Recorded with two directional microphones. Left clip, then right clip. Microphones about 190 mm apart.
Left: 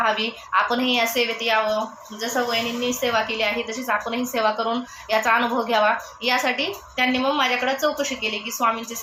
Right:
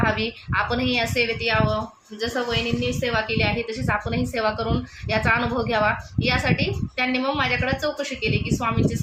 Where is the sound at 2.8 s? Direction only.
45° right (ahead or behind).